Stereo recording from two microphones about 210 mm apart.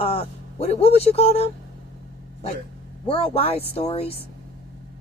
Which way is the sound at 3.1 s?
25° left (ahead or behind).